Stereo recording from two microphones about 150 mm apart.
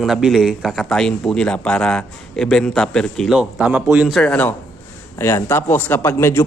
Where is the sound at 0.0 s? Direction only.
Centre (ahead or behind).